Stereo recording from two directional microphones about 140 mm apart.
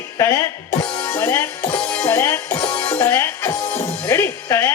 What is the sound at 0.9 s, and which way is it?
Music, 15° left (ahead or behind).